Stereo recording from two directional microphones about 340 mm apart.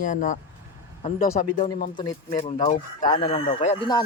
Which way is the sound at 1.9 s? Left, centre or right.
Centre.